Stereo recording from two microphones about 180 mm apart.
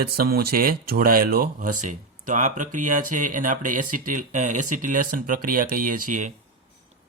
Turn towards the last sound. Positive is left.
turn(degrees=-45)  # may be behind; listen again after turning